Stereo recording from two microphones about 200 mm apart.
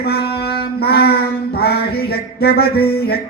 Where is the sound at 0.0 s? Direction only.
50° left (ahead or behind).